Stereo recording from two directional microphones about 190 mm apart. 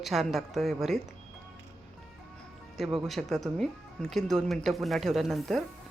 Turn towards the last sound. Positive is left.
turn(degrees=0)  # may be behind; listen again after turning